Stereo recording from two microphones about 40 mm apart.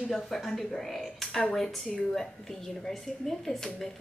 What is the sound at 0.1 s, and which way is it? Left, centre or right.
Speech, centre.